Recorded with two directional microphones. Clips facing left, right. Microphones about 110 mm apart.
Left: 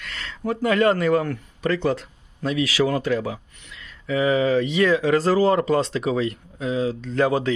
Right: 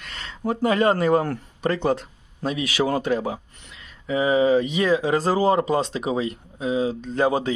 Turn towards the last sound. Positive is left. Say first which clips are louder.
# left 1 dB
turn(degrees=-20)  # may be behind; listen again after turning